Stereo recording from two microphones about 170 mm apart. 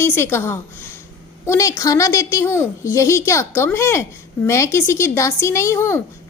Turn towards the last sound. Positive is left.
turn(degrees=15)  # may be behind; listen again after turning